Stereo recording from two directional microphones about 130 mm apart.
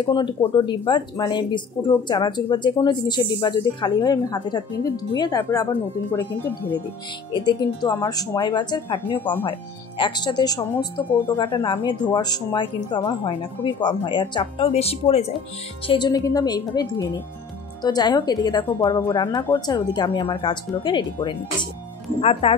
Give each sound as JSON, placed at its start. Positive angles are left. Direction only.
{"t": 0.0, "sound": "speech", "side_deg": 40}
{"t": 6.1, "sound": "speech", "side_deg": 15}
{"t": 7.3, "sound": "speech", "side_deg": 30}
{"t": 15.9, "sound": "speech", "side_deg": 30}
{"t": 22.2, "sound": "speech", "side_deg": 50}